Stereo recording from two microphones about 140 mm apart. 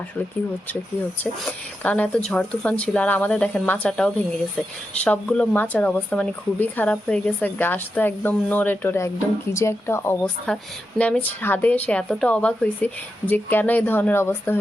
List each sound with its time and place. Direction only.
1.2 s a woman's voice: 10° left (ahead or behind)